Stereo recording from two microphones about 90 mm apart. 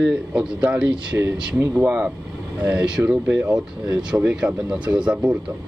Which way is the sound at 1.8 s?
20° right (ahead or behind).